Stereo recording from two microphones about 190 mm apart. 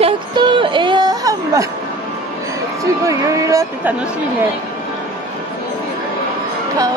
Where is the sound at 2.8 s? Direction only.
15° right (ahead or behind).